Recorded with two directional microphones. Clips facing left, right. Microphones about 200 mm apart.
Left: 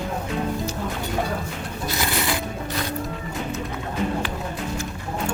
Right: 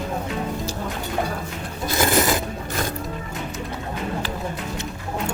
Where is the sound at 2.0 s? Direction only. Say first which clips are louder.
Right 7 dB; 45° right (ahead or behind).